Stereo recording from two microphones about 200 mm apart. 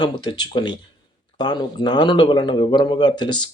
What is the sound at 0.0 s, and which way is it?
Speech, 20° left (ahead or behind).